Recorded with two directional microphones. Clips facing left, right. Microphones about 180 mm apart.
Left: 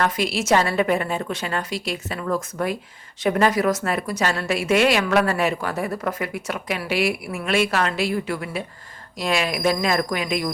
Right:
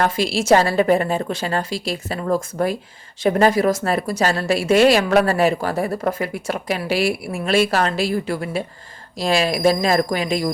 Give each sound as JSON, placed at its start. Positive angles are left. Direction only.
{"t": 0.0, "sound": "a woman's voice", "side_deg": -30}